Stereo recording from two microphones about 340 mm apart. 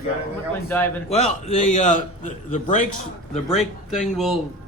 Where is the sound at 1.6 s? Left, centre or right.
Left.